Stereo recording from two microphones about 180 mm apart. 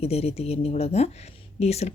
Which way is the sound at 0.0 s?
35° left (ahead or behind).